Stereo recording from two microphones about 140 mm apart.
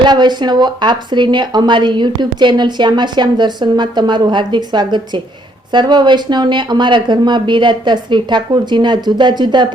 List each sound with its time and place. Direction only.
0.0 s speech: 30° right (ahead or behind)